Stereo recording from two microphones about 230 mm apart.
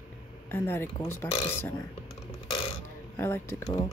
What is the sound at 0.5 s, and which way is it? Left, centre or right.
Speech, centre.